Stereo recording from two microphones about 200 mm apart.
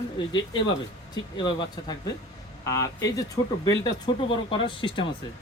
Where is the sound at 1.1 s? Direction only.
20° left (ahead or behind).